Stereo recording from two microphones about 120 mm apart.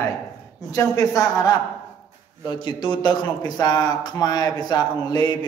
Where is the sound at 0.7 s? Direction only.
30° left (ahead or behind).